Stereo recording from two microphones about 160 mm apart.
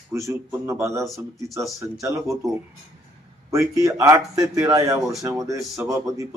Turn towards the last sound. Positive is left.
turn(degrees=-20)  # may be behind; listen again after turning